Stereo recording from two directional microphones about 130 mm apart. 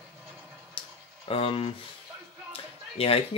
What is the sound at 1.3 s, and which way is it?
Speech, 45° left (ahead or behind).